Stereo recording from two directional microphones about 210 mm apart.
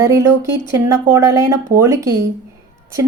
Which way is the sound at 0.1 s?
15° right (ahead or behind).